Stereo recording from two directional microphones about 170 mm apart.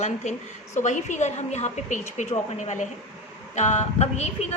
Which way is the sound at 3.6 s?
40° left (ahead or behind).